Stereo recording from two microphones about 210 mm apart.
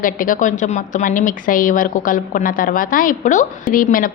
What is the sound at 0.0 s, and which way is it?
A woman's voice, 40° left (ahead or behind).